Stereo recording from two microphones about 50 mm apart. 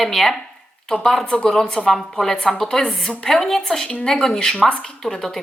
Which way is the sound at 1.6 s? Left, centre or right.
Centre.